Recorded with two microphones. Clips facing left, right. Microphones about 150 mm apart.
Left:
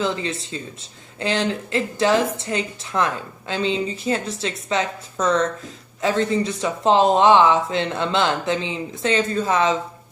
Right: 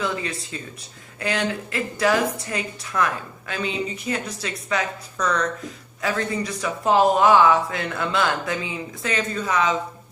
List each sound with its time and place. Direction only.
0.0 s speech: 25° left (ahead or behind)